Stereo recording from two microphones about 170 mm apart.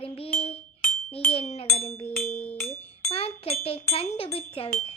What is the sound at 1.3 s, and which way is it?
Speech, 35° left (ahead or behind).